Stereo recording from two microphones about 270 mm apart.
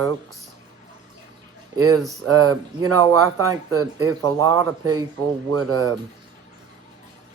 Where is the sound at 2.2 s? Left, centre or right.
Right.